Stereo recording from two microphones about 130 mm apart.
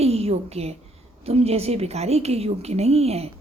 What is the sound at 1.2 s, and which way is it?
A woman's voice, 50° right (ahead or behind).